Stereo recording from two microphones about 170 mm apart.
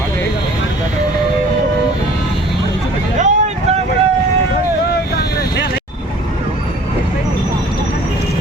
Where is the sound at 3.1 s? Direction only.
45° right (ahead or behind).